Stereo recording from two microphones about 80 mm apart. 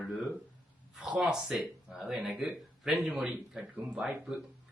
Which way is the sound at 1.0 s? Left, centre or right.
Centre.